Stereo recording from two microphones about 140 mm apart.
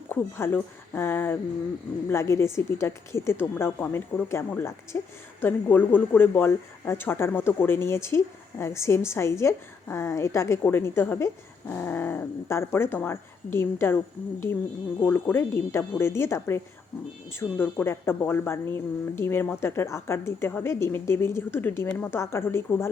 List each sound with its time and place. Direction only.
0.1 s a woman's voice: 15° left (ahead or behind)
15.0 s speech: 15° left (ahead or behind)
17.6 s speech: 15° left (ahead or behind)